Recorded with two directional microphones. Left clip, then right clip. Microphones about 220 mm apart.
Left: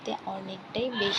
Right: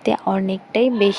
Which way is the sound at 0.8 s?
90° right.